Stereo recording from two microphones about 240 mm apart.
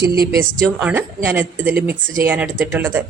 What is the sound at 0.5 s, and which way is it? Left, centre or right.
Speech, centre.